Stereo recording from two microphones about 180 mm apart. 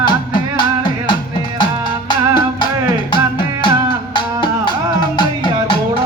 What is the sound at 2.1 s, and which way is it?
Music, 25° left (ahead or behind).